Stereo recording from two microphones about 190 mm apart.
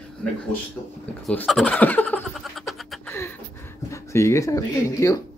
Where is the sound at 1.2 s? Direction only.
5° left (ahead or behind).